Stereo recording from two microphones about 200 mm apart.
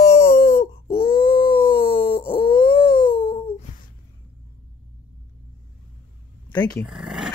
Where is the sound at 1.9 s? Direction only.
25° left (ahead or behind).